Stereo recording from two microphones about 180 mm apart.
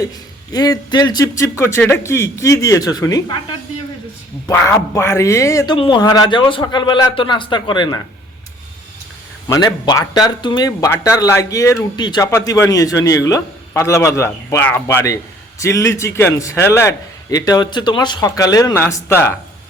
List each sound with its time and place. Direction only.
0.5 s speech: 20° left (ahead or behind)
4.4 s a man's voice: 15° left (ahead or behind)
9.5 s a man's voice: 20° left (ahead or behind)